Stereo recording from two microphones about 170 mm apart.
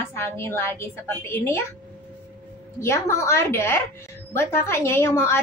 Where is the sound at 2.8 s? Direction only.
15° left (ahead or behind).